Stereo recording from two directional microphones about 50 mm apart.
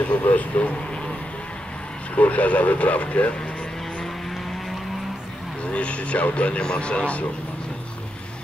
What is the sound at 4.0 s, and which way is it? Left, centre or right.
Vehicle, centre.